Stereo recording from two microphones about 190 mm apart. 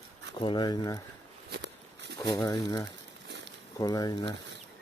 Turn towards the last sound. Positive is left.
turn(degrees=20)  # may be behind; listen again after turning